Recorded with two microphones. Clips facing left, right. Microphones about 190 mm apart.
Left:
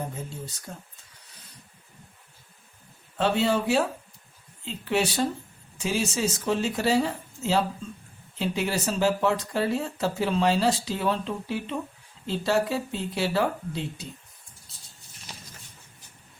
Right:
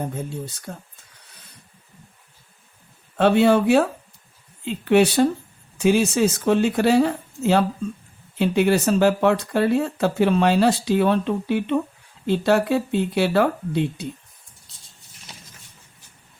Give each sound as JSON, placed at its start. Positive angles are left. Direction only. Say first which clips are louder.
{"t": 0.7, "sound": "speech", "louder": "right 5 dB", "side_deg": -60}
{"t": 3.2, "sound": "speech", "louder": "right 8 dB", "side_deg": -60}